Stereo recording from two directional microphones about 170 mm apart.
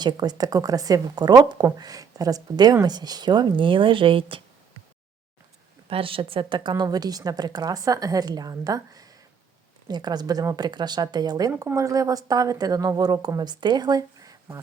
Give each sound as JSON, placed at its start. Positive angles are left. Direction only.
{"t": 0.0, "sound": "a woman's voice", "side_deg": -25}
{"t": 5.9, "sound": "a woman's voice", "side_deg": -30}